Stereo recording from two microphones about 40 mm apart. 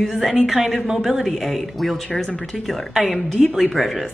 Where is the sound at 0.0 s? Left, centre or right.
Centre.